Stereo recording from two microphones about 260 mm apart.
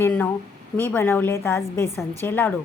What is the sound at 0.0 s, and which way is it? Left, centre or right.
A woman's voice, centre.